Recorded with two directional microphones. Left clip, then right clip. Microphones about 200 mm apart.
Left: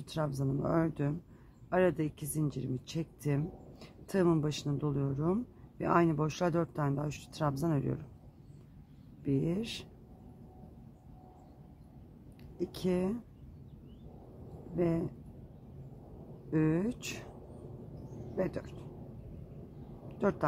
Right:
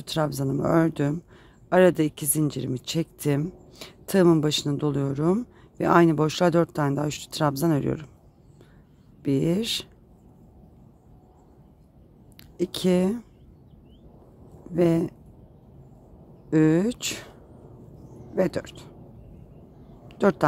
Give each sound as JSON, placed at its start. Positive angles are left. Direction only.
{"t": 0.0, "sound": "speech", "side_deg": -45}
{"t": 9.2, "sound": "speech", "side_deg": -50}
{"t": 12.5, "sound": "speech", "side_deg": -45}
{"t": 14.8, "sound": "speech", "side_deg": -50}
{"t": 16.4, "sound": "speech", "side_deg": -45}
{"t": 18.3, "sound": "speech", "side_deg": -45}
{"t": 20.1, "sound": "a sound", "side_deg": -45}